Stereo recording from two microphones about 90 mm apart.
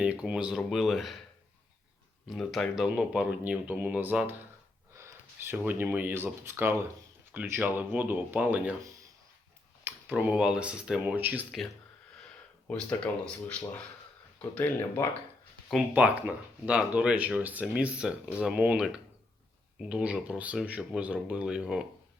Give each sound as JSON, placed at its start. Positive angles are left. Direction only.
{"t": 0.0, "sound": "speech", "side_deg": -10}
{"t": 0.5, "sound": "speech", "side_deg": 0}
{"t": 2.3, "sound": "speech", "side_deg": 0}
{"t": 3.4, "sound": "speech", "side_deg": -15}
{"t": 10.1, "sound": "speech", "side_deg": -15}
{"t": 12.6, "sound": "speech", "side_deg": 10}
{"t": 15.9, "sound": "speech", "side_deg": -20}